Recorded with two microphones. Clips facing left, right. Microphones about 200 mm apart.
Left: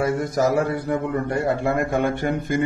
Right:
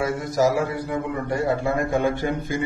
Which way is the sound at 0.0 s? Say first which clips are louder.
Left 1 dB; 55° left (ahead or behind).